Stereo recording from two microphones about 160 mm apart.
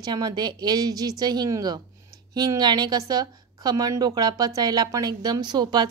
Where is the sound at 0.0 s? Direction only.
25° right (ahead or behind).